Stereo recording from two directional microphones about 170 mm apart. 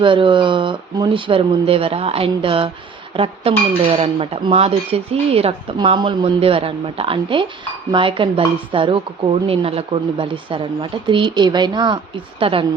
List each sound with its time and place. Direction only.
0.0 s speech: 30° right (ahead or behind)